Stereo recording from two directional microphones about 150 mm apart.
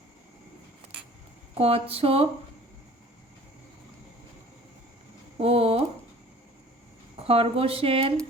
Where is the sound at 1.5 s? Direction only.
40° right (ahead or behind).